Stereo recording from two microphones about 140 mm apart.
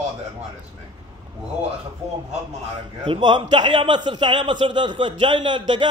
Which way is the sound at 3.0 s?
35° right (ahead or behind).